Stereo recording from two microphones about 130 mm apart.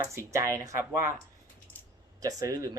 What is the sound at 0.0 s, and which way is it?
Speech, 25° right (ahead or behind).